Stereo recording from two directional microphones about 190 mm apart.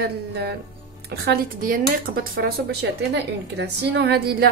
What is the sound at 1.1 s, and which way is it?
A woman's voice, 50° right (ahead or behind).